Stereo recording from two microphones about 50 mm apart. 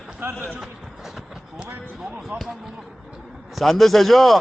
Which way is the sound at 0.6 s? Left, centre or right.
Centre.